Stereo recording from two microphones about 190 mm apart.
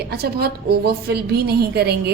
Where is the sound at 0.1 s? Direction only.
55° right (ahead or behind).